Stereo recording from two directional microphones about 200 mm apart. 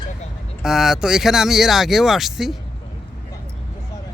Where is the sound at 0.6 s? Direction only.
Centre (ahead or behind).